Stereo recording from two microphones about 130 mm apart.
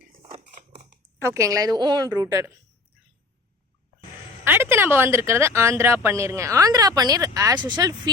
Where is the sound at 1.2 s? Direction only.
25° right (ahead or behind).